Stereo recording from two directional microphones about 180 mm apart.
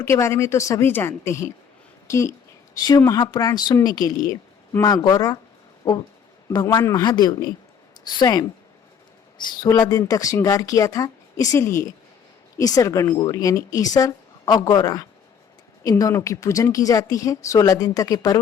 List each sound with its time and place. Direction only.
0.0 s a woman's voice: 15° left (ahead or behind)
9.5 s speech: 25° left (ahead or behind)